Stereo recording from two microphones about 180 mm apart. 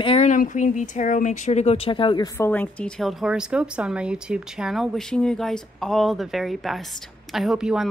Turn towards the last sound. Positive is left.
turn(degrees=-5)  # may be behind; listen again after turning